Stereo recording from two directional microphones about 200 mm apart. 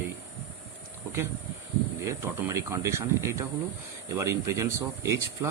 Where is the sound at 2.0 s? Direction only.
15° right (ahead or behind).